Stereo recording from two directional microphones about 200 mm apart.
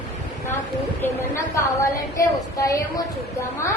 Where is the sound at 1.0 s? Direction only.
15° left (ahead or behind).